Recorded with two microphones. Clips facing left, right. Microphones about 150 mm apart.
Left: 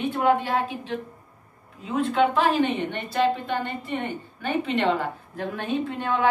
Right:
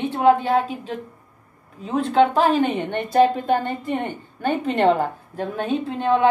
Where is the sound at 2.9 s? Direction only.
50° right (ahead or behind).